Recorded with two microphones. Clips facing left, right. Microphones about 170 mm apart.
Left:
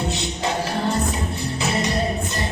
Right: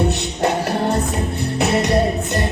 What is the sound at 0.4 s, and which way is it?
Music, 60° right (ahead or behind).